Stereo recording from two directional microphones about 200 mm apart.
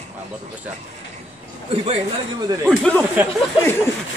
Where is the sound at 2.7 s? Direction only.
5° left (ahead or behind).